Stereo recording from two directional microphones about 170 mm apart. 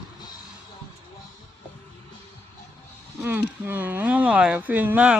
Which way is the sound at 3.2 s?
10° right (ahead or behind).